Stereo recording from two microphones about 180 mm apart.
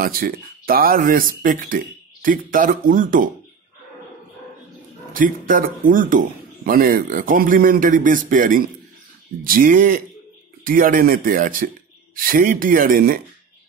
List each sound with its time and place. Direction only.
0.0 s speech: 55° right (ahead or behind)
5.1 s speech: 50° right (ahead or behind)